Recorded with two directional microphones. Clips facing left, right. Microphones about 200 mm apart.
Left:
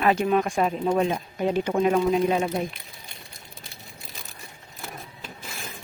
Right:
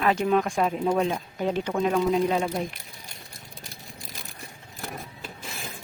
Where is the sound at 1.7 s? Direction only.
15° left (ahead or behind).